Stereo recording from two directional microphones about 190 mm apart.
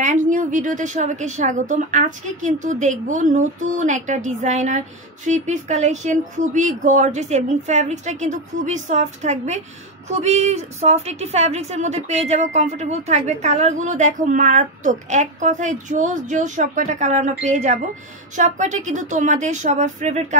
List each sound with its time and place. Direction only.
0.0 s a woman's voice: 45° right (ahead or behind)